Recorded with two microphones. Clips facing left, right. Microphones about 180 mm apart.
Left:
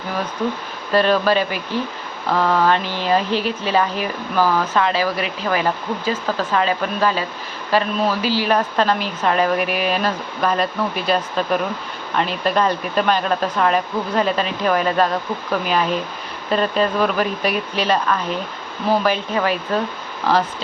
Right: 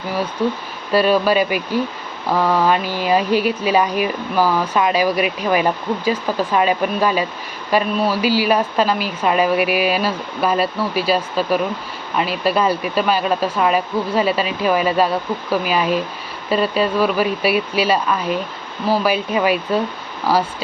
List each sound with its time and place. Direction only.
0.9 s speech: 10° right (ahead or behind)